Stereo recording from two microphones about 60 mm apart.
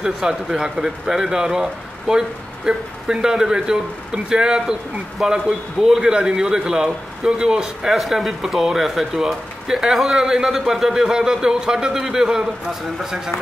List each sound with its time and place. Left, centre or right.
0.0 s speech: centre